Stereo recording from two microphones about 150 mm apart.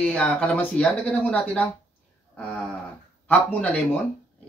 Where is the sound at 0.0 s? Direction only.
10° left (ahead or behind).